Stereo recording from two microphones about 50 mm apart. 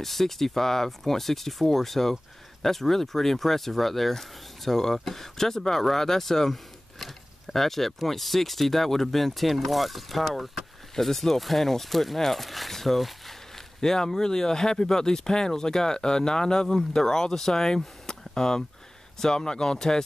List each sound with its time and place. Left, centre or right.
0.0 s speech: centre